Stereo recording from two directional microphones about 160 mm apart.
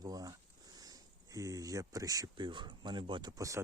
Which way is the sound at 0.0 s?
25° right (ahead or behind).